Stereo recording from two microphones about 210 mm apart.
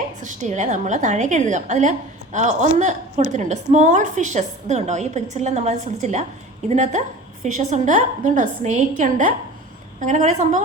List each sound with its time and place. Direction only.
0.2 s a woman's voice: 35° right (ahead or behind)